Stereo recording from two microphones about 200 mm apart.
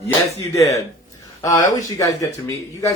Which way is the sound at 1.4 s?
15° left (ahead or behind).